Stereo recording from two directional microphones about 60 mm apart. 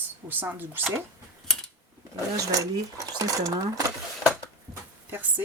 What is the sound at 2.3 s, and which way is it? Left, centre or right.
Speech, right.